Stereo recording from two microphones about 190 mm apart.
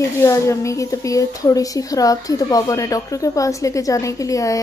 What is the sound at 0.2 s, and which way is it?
A woman's voice, 15° left (ahead or behind).